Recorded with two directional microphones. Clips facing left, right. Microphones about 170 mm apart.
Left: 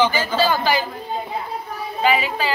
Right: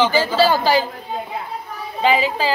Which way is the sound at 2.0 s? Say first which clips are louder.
Right 2 dB; 25° right (ahead or behind).